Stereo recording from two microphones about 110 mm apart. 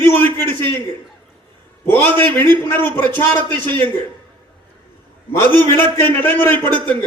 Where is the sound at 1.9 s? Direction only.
20° left (ahead or behind).